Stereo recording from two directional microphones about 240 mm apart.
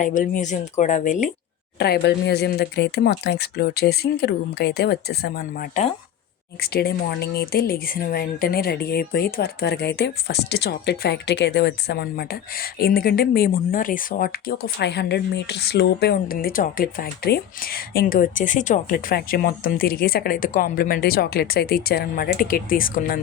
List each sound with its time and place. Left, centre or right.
0.0 s speech: left
1.8 s speech: left